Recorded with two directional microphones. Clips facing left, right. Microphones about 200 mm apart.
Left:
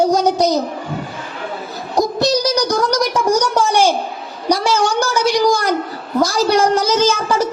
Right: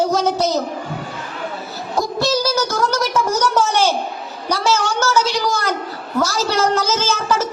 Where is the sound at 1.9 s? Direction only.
20° left (ahead or behind).